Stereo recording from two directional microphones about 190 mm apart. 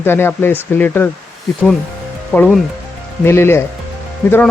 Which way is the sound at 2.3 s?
10° left (ahead or behind).